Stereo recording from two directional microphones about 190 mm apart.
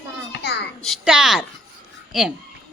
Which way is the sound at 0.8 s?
Centre (ahead or behind).